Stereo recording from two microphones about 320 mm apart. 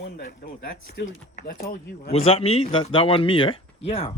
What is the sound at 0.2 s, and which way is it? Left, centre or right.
Speech, left.